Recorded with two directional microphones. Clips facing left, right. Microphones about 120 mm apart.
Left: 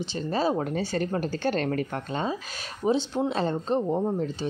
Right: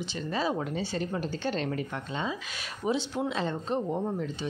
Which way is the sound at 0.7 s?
50° left (ahead or behind).